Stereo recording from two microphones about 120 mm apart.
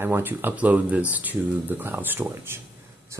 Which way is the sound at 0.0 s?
15° right (ahead or behind).